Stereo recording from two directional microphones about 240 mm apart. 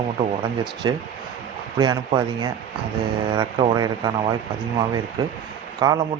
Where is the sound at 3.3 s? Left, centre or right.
Centre.